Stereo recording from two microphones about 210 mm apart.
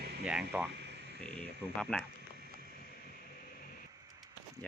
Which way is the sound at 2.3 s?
50° right (ahead or behind).